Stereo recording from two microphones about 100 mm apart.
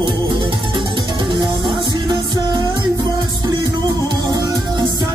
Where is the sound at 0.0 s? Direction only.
50° right (ahead or behind).